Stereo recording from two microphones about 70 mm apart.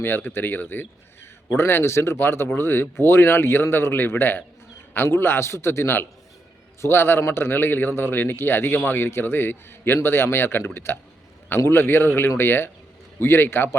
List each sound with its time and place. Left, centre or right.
0.0 s speech: left